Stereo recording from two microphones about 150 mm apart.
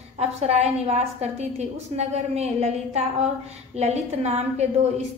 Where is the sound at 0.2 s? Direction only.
45° right (ahead or behind).